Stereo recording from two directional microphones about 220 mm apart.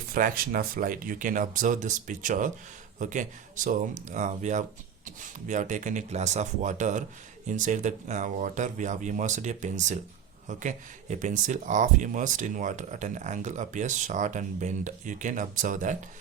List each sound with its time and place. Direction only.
0.1 s speech: 40° right (ahead or behind)